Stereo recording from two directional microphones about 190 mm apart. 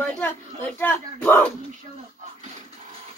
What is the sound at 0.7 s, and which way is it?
Speech, 10° left (ahead or behind).